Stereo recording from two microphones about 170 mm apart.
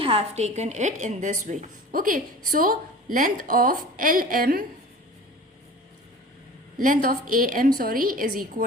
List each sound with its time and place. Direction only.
0.0 s a woman's voice: 35° right (ahead or behind); by 4.6 s 60° right (ahead or behind)
6.7 s a woman's voice: 55° right (ahead or behind)